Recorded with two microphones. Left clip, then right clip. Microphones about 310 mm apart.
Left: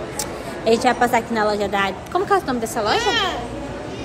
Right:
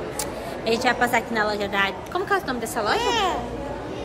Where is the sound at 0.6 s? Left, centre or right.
Centre.